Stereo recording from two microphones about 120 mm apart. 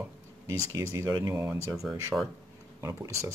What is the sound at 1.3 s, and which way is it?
Speech, 20° right (ahead or behind).